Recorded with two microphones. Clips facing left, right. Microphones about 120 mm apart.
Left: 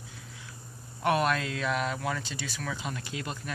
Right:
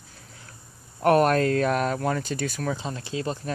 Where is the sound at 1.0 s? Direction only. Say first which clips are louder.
Right 8 dB; 45° right (ahead or behind).